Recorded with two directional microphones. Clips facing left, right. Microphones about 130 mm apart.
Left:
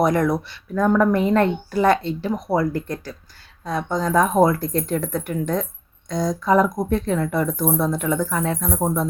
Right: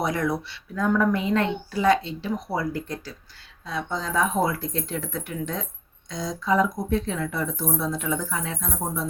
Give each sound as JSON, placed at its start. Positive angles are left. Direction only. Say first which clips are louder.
{"t": 0.0, "sound": "speech", "louder": "left 7 dB", "side_deg": 50}